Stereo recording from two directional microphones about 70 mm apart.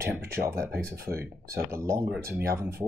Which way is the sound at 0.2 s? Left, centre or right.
Right.